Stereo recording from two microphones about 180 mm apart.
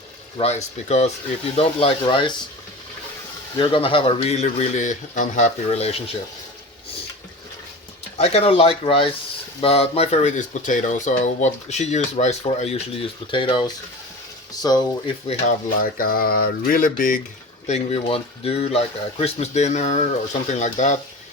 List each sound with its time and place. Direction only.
0.3 s speech: 35° left (ahead or behind)
3.6 s speech: 30° left (ahead or behind)
8.2 s speech: 35° left (ahead or behind)
15.3 s speech: 50° left (ahead or behind)
17.7 s speech: 35° left (ahead or behind)